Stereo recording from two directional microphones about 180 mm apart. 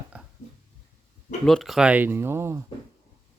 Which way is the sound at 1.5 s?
Centre (ahead or behind).